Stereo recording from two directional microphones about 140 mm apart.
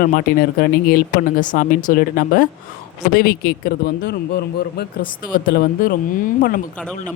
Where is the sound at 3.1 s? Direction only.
90° left.